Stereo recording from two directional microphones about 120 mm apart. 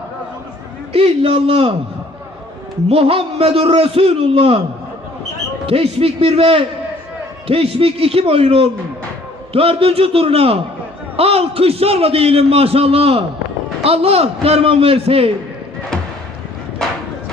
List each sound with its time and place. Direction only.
0.9 s a man's voice: 55° right (ahead or behind)
2.9 s a man's voice: 55° right (ahead or behind)
5.6 s a man's voice: 55° right (ahead or behind)